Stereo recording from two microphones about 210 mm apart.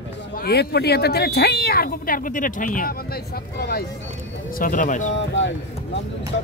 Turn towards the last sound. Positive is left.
turn(degrees=60)  # may be behind; listen again after turning